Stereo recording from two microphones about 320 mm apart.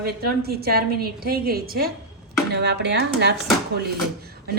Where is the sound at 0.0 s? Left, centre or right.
Right.